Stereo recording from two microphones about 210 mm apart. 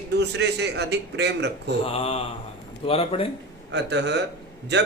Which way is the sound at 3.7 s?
55° right (ahead or behind).